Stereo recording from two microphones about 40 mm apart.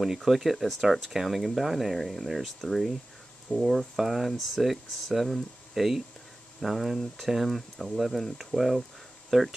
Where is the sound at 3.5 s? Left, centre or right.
Left.